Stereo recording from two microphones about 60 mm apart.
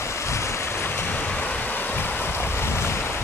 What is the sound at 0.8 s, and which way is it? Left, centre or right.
Waves, left.